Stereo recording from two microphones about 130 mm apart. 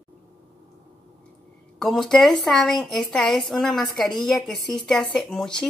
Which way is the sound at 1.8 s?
Centre (ahead or behind).